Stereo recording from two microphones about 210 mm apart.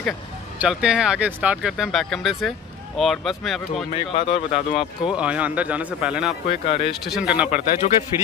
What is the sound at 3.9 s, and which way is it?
Speech, 30° left (ahead or behind).